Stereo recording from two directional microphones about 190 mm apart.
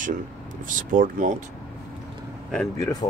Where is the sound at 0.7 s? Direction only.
45° right (ahead or behind).